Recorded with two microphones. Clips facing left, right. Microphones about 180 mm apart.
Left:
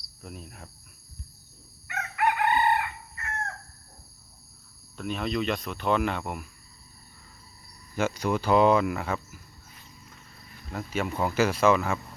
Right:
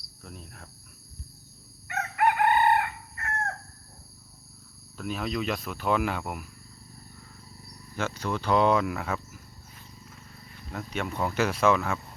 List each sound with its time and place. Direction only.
0.2 s cricket: 10° left (ahead or behind)
1.9 s chicken: 45° right (ahead or behind)
4.9 s speech: 5° right (ahead or behind)
7.9 s speech: 10° left (ahead or behind)
10.7 s speech: centre (ahead or behind)